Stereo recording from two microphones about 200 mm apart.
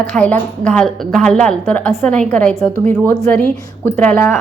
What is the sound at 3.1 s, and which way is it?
Speech, 15° left (ahead or behind).